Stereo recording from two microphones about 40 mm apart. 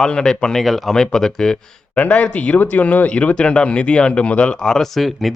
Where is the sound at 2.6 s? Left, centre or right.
Left.